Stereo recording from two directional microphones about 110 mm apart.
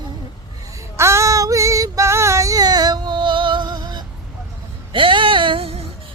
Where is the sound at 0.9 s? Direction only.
25° right (ahead or behind); by 4.0 s 40° right (ahead or behind).